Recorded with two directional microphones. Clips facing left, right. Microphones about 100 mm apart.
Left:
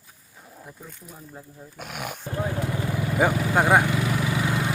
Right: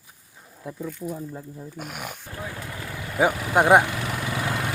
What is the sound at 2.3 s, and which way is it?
Vehicle, 30° left (ahead or behind).